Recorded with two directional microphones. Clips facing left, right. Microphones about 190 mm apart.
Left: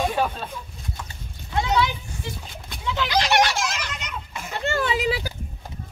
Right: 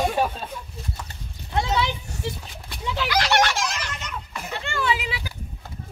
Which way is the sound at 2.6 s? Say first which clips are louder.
Left 1 dB; 5° right (ahead or behind).